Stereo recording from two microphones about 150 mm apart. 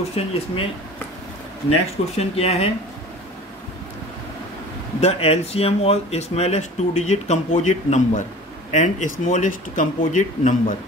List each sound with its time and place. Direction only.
0.2 s speech: 45° left (ahead or behind)
1.7 s speech: 40° left (ahead or behind)
5.0 s speech: 45° left (ahead or behind); by 10.5 s 60° left (ahead or behind)